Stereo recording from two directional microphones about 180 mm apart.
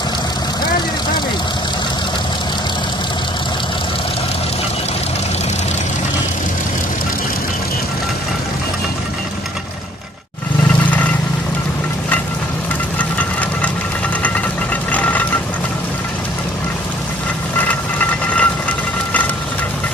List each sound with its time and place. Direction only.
14.2 s vehicle: 10° left (ahead or behind)
17.6 s vehicle: 10° left (ahead or behind)